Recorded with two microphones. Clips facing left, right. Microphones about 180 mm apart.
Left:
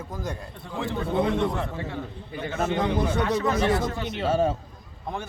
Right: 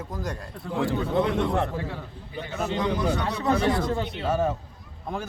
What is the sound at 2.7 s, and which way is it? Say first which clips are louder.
Speech: right 2 dB; 25° left (ahead or behind).